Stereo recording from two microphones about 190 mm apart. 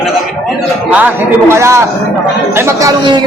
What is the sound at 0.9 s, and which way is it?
A man's voice, 10° right (ahead or behind).